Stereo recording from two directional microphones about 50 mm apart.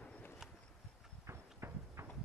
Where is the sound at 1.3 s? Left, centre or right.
Right.